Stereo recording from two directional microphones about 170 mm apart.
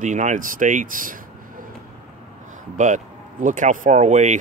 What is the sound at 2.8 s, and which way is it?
Speech, 50° right (ahead or behind).